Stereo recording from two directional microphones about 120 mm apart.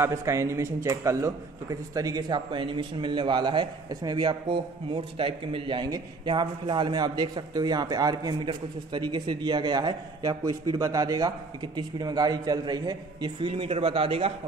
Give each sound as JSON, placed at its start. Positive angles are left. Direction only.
{"t": 0.0, "sound": "a man's voice", "side_deg": -25}